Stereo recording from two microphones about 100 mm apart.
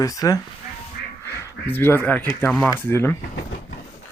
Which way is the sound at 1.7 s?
20° left (ahead or behind).